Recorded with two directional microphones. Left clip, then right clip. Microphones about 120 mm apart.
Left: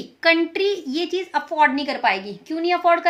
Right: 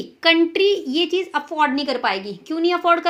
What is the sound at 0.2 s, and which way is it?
A child's voice, 25° right (ahead or behind).